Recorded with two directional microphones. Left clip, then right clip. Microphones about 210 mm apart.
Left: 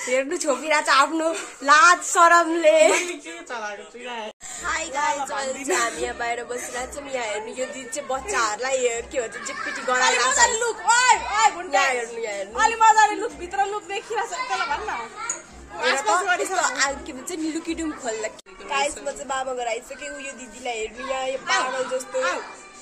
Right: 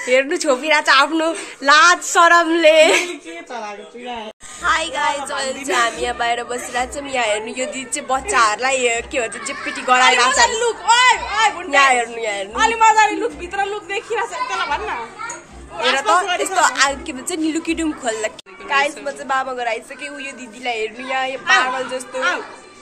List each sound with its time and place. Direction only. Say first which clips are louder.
0.1 s a woman's voice: right 7 dB; 5° left (ahead or behind)
4.6 s a woman's voice: right 6 dB; 5° left (ahead or behind)
6.7 s a woman's voice: right 8 dB; 15° right (ahead or behind)
10.3 s speech: right 5 dB; 30° left (ahead or behind)
11.7 s a woman's voice: right 7 dB; 25° right (ahead or behind)
12.5 s a woman's voice: right 3 dB; 15° left (ahead or behind)
16.5 s a woman's voice: right 7 dB; centre (ahead or behind)